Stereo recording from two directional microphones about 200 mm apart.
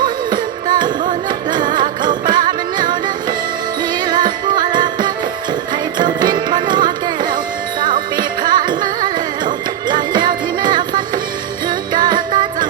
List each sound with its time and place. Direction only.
0.0 s music: 20° right (ahead or behind)